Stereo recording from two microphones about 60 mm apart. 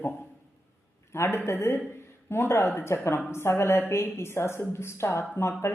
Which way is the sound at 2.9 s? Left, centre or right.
Left.